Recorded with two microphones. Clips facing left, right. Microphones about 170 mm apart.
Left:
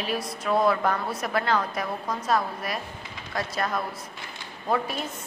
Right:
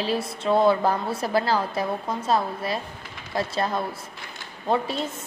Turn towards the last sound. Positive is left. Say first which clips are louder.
# right 3 dB
turn(degrees=-25)  # may be behind; listen again after turning